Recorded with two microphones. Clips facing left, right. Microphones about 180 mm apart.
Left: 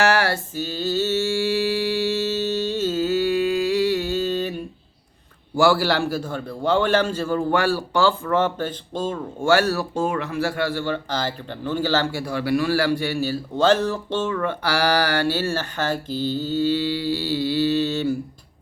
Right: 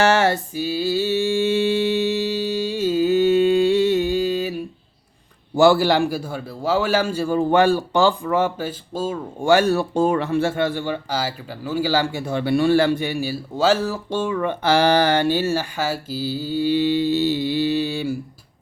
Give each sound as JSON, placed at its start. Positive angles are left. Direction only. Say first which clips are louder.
{"t": 0.0, "sound": "a sound", "louder": "right 3 dB", "side_deg": -25}
{"t": 0.5, "sound": "mantra", "louder": "right 3 dB", "side_deg": -10}
{"t": 5.5, "sound": "speech", "louder": "right 4 dB", "side_deg": -20}
{"t": 9.5, "sound": "speech", "louder": "right 3 dB", "side_deg": -20}
{"t": 12.2, "sound": "speech", "louder": "right 3 dB", "side_deg": -25}